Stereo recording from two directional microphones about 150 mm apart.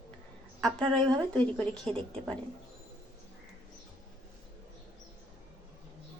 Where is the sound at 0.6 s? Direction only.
5° left (ahead or behind).